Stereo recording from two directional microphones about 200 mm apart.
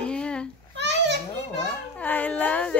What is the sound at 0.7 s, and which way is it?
Children playing, 60° right (ahead or behind).